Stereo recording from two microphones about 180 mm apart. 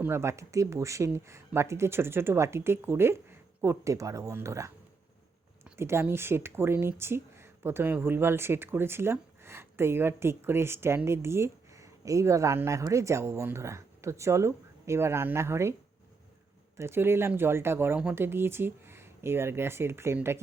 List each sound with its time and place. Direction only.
0.0 s speech: 15° right (ahead or behind)
16.7 s speech: 15° right (ahead or behind)